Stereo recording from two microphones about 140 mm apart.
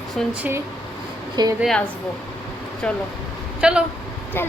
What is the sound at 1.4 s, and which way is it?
Speech, 30° right (ahead or behind).